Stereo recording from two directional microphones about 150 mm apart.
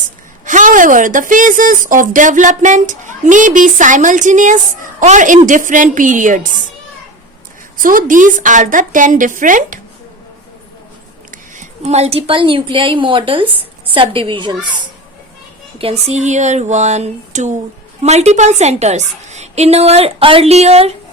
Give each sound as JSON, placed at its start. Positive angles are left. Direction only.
{"t": 0.4, "sound": "a woman's voice", "side_deg": -60}
{"t": 7.8, "sound": "a woman's voice", "side_deg": -65}
{"t": 11.3, "sound": "a woman's voice", "side_deg": -55}
{"t": 15.8, "sound": "a woman's voice", "side_deg": -40}